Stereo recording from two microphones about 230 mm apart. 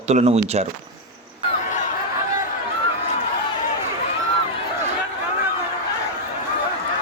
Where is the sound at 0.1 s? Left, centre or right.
Right.